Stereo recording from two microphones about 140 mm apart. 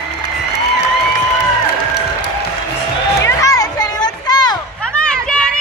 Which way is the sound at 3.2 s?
25° left (ahead or behind).